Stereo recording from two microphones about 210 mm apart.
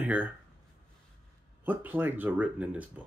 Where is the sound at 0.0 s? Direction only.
5° right (ahead or behind).